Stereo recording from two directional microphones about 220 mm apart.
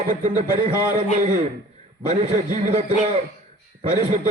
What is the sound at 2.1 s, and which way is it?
A man's voice, 35° right (ahead or behind).